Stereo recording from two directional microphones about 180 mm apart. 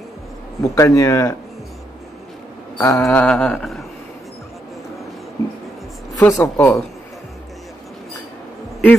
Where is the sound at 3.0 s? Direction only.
5° left (ahead or behind).